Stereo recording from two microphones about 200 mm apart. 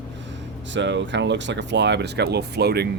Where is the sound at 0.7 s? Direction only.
65° right (ahead or behind).